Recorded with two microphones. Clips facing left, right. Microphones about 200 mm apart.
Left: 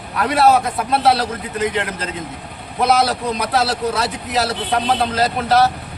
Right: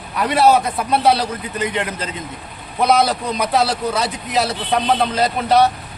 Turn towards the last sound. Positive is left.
turn(degrees=0)  # may be behind; listen again after turning